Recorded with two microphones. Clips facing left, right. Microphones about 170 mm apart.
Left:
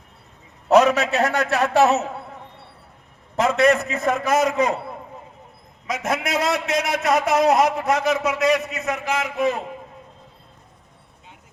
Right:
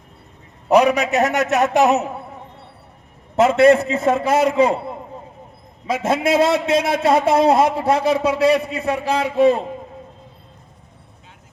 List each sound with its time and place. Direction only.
0.7 s a man's voice: 10° right (ahead or behind)
3.3 s a man's voice: 25° right (ahead or behind)